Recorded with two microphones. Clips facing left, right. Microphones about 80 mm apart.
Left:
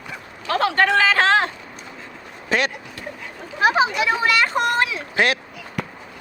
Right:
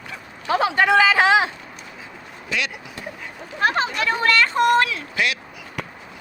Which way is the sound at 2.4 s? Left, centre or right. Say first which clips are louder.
Left 5 dB; left.